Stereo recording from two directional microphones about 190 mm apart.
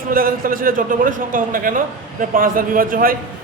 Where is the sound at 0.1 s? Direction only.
50° right (ahead or behind).